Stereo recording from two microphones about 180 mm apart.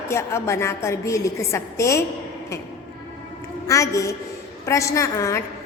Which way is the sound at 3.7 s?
15° left (ahead or behind).